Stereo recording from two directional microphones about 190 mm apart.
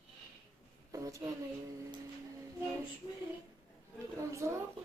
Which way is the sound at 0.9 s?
15° right (ahead or behind).